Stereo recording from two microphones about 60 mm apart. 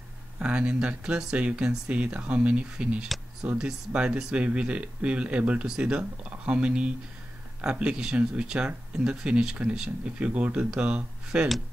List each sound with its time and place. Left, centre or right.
0.4 s speech: centre
4.4 s speech: right